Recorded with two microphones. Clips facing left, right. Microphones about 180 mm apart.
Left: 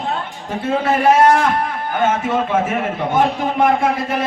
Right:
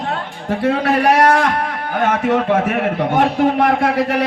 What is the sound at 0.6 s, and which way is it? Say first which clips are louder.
A man's voice: right 1 dB; 70° right (ahead or behind).